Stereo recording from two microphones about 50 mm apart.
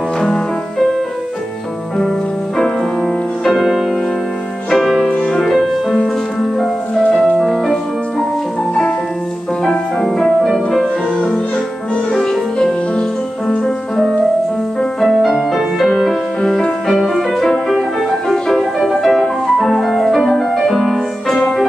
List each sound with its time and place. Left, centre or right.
2.0 s music: centre
5.1 s music: centre
5.4 s music: centre
9.7 s music: centre
16.3 s music: centre
16.8 s music: centre